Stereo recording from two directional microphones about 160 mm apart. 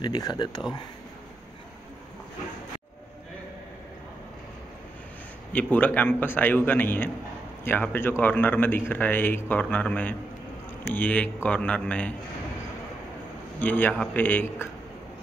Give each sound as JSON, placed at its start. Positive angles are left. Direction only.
{"t": 0.0, "sound": "speech", "side_deg": 25}
{"t": 5.5, "sound": "a man's voice", "side_deg": 10}
{"t": 13.6, "sound": "a man's voice", "side_deg": 10}